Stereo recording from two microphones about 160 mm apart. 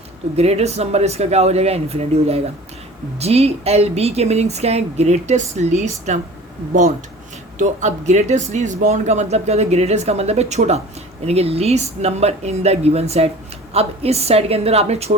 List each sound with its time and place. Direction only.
0.3 s speech: 40° right (ahead or behind)
7.6 s speech: 50° right (ahead or behind)